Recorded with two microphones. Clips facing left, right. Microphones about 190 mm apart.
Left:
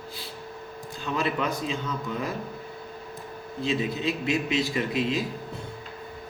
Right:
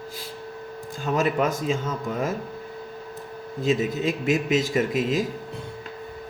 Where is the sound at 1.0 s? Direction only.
45° right (ahead or behind).